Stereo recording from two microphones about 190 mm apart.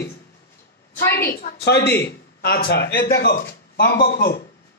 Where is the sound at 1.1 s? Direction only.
55° left (ahead or behind).